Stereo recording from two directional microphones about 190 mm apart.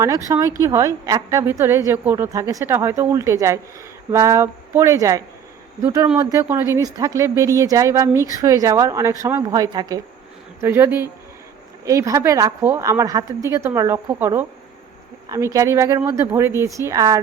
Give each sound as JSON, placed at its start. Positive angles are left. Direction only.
{"t": 0.0, "sound": "a woman's voice", "side_deg": -15}